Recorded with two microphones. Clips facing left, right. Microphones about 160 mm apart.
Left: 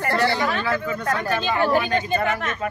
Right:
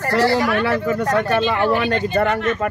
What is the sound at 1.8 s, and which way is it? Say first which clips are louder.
Speech: right 3 dB; 70° right (ahead or behind).